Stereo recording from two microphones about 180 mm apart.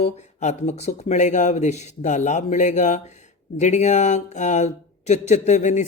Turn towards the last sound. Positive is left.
turn(degrees=40)  # may be behind; listen again after turning